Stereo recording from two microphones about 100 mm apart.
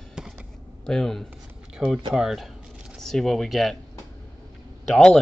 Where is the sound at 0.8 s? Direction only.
5° left (ahead or behind).